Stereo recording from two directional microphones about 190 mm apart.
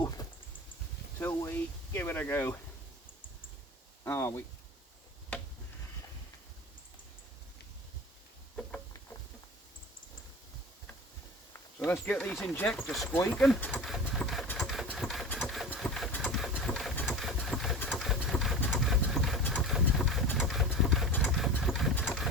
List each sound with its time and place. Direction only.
0.2 s a sound: 20° left (ahead or behind)
1.2 s speech: 15° left (ahead or behind)
4.0 s speech: 10° left (ahead or behind)
11.9 s speech: 10° left (ahead or behind)
12.9 s speech: centre (ahead or behind)
13.1 s a sound: 10° left (ahead or behind)
14.8 s engine: centre (ahead or behind)
17.1 s sewing machine: centre (ahead or behind)
19.7 s vehicle: centre (ahead or behind)
20.7 s engine: centre (ahead or behind)